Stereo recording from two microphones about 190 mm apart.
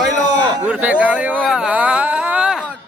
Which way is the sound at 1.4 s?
5° right (ahead or behind).